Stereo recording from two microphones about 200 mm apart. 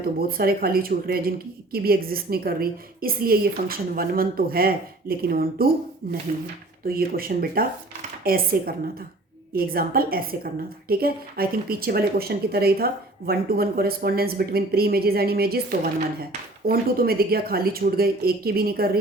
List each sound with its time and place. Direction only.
0.2 s a woman's voice: 50° right (ahead or behind)